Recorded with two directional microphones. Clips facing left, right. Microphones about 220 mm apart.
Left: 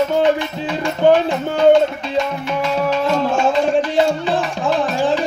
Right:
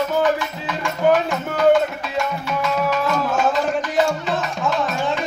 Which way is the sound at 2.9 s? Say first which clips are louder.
Left 4 dB; 30° left (ahead or behind).